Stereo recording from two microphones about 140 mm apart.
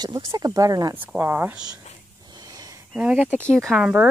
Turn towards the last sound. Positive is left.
turn(degrees=0)  # may be behind; listen again after turning